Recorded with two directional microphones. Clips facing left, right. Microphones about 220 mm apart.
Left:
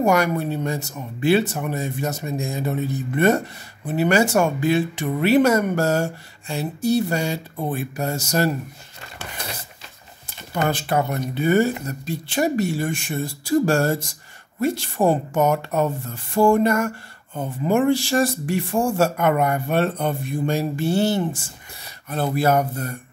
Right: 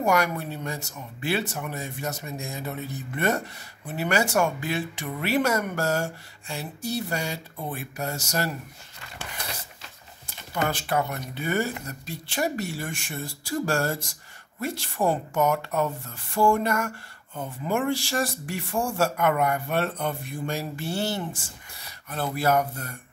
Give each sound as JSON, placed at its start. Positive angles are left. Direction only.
{"t": 0.0, "sound": "speech", "side_deg": 25}
{"t": 9.4, "sound": "mechanisms", "side_deg": 25}
{"t": 10.7, "sound": "speech", "side_deg": 25}